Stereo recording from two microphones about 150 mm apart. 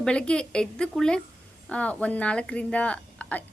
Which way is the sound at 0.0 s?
5° left (ahead or behind).